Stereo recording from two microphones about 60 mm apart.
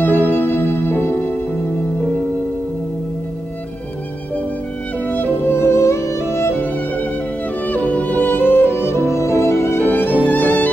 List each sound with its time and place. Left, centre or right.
0.0 s music: left
5.0 s music: left
5.6 s music: left
7.6 s music: left
9.8 s music: left